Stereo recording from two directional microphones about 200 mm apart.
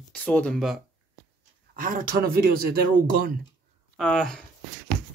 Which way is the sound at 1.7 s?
45° right (ahead or behind).